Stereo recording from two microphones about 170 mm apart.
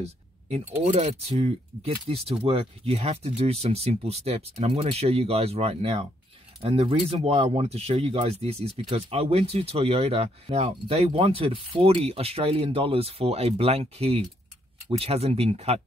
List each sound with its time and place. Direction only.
0.0 s speech: 40° right (ahead or behind)